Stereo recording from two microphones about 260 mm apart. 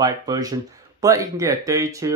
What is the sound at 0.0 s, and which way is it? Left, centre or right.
Speech, centre.